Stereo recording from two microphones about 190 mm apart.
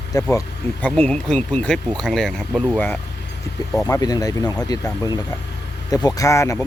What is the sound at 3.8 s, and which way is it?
Speech, 20° left (ahead or behind).